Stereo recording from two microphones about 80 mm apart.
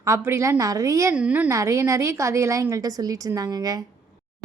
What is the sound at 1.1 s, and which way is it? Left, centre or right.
Speech, centre.